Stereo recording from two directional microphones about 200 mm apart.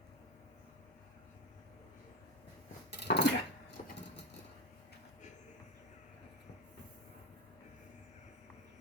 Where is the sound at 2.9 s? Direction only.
55° left (ahead or behind).